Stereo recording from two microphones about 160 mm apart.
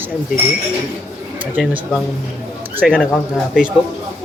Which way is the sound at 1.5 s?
10° right (ahead or behind).